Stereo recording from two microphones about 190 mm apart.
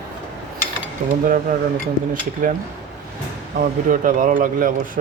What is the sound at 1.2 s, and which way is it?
Speech, 45° right (ahead or behind).